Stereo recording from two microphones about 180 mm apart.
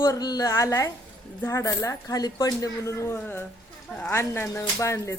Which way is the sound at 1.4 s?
15° left (ahead or behind).